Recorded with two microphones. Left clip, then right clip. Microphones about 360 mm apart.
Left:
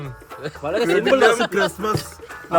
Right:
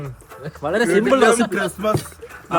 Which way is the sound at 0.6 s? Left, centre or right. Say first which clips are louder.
Right 2 dB; right.